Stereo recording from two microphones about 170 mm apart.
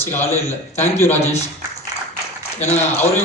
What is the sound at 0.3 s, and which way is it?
Speech, 40° left (ahead or behind).